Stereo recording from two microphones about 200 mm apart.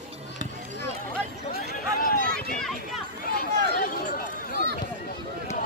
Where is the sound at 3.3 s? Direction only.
45° left (ahead or behind).